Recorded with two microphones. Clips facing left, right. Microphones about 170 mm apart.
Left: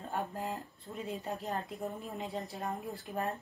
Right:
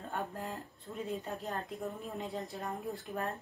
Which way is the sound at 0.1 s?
15° left (ahead or behind).